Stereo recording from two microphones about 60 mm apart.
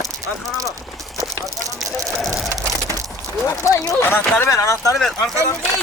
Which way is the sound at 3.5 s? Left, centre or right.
Left.